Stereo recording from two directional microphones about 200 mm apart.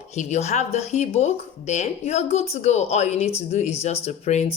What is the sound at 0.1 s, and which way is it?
A woman's voice, 35° left (ahead or behind).